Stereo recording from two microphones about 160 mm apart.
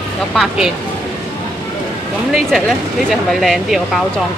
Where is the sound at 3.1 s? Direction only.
Centre (ahead or behind).